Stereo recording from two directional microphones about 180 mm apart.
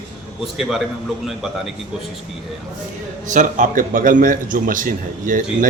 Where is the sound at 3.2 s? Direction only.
45° right (ahead or behind).